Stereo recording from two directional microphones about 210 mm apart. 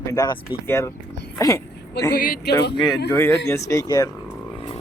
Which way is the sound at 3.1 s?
10° left (ahead or behind).